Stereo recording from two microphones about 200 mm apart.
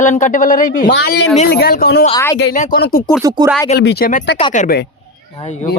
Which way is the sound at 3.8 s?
55° left (ahead or behind).